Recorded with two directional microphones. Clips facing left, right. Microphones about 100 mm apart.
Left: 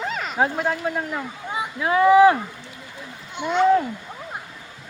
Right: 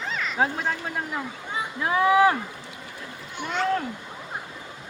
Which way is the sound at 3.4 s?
20° left (ahead or behind).